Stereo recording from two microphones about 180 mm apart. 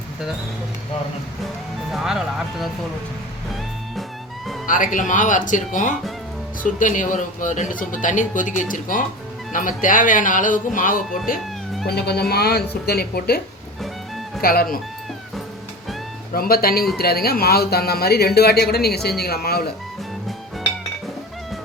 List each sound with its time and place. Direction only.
1.9 s speech: centre (ahead or behind)
4.6 s speech: 45° left (ahead or behind)
11.9 s speech: 65° left (ahead or behind)
14.4 s speech: 55° left (ahead or behind)
16.3 s speech: 55° left (ahead or behind)